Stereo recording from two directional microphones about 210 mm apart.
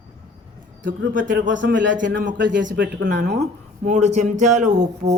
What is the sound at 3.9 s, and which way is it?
Speech, 35° right (ahead or behind).